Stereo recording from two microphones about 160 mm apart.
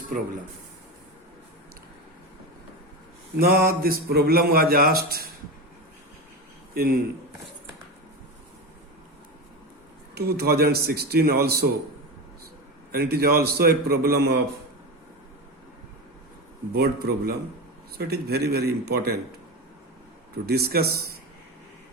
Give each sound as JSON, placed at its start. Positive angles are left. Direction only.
{"t": 3.3, "sound": "speech", "side_deg": -70}
{"t": 6.7, "sound": "speech", "side_deg": -75}
{"t": 10.2, "sound": "a man's voice", "side_deg": -80}
{"t": 12.9, "sound": "a man's voice", "side_deg": -75}
{"t": 16.7, "sound": "a man's voice", "side_deg": -80}
{"t": 20.5, "sound": "speech", "side_deg": -75}